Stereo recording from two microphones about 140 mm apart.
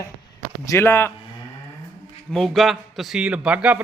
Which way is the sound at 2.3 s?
Centre (ahead or behind).